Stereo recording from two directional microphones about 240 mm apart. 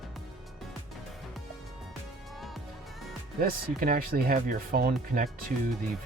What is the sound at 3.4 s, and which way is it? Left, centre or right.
Speech, right.